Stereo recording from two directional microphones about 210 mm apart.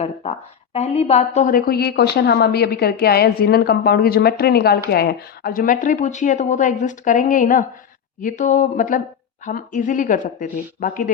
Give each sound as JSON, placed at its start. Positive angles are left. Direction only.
{"t": 0.0, "sound": "a woman's voice", "side_deg": 30}